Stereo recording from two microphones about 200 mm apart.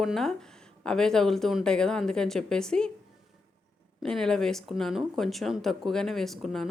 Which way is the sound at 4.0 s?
5° left (ahead or behind).